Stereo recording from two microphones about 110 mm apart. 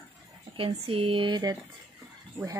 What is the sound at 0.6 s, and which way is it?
Speech, 55° right (ahead or behind).